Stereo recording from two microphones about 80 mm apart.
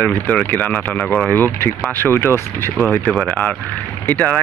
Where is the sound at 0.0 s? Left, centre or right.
Left.